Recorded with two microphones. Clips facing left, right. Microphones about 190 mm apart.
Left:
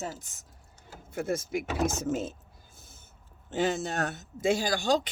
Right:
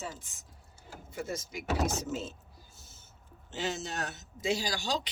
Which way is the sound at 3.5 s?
55° left (ahead or behind).